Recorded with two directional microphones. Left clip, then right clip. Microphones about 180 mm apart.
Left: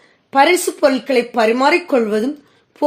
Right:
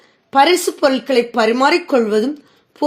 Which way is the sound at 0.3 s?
20° right (ahead or behind).